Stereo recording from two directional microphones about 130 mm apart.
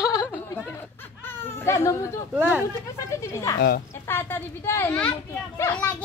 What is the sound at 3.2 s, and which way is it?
Speech, 25° left (ahead or behind).